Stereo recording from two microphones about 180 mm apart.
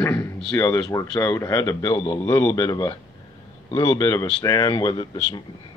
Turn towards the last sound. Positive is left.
turn(degrees=20)  # may be behind; listen again after turning